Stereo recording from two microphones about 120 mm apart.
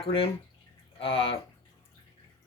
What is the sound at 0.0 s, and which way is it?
Speech, 50° left (ahead or behind).